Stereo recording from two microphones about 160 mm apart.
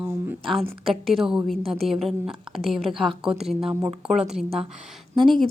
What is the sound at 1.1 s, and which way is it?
A woman's voice, 5° right (ahead or behind).